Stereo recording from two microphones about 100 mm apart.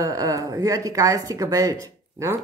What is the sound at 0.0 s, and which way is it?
Speech, 35° right (ahead or behind).